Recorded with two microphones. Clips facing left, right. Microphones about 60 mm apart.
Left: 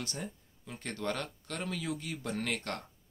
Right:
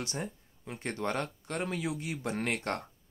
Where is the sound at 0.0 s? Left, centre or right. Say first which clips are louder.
Right 3 dB; right.